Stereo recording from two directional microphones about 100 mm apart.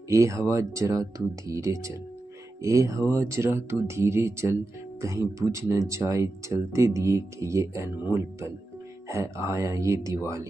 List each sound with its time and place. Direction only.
0.1 s speech: 35° right (ahead or behind)